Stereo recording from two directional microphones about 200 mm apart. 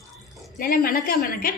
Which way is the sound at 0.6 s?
45° left (ahead or behind).